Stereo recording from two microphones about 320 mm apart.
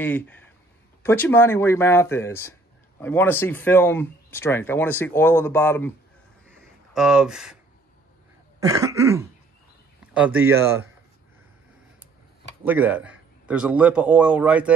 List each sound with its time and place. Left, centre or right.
0.0 s a man's voice: centre
6.6 s a sound: centre
8.5 s cough: centre
10.1 s a man's voice: centre
12.6 s a man's voice: centre